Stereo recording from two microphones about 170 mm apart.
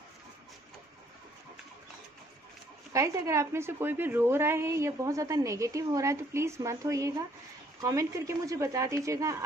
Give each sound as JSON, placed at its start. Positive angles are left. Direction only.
{"t": 2.9, "sound": "a woman's voice", "side_deg": -15}